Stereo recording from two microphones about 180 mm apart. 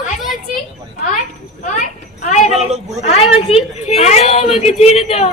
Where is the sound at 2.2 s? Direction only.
40° left (ahead or behind).